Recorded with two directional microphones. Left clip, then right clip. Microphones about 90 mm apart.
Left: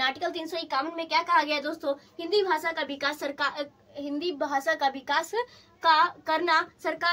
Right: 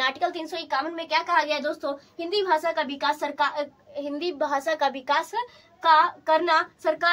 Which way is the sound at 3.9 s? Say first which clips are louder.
Right 3 dB; 45° right (ahead or behind).